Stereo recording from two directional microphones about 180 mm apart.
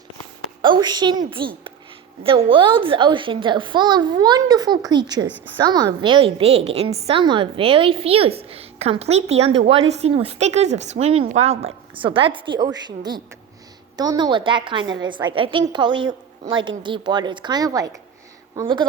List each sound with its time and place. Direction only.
0.6 s a child's voice: 25° right (ahead or behind)